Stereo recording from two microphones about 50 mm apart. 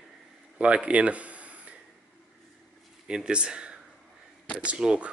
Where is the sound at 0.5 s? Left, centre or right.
Right.